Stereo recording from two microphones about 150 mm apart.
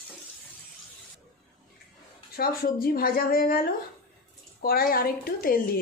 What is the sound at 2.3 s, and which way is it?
Speech, 85° left.